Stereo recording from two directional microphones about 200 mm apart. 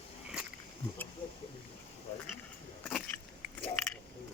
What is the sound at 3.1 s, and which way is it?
Biting, 10° left (ahead or behind).